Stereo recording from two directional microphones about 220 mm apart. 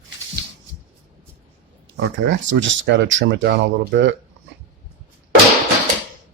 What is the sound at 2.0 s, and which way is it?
Speech, 60° right (ahead or behind).